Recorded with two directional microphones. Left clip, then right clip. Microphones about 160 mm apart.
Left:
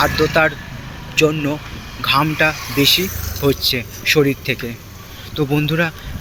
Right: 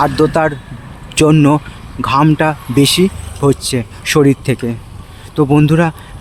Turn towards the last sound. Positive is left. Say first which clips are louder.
# right 6 dB
turn(degrees=-50)  # may be behind; listen again after turning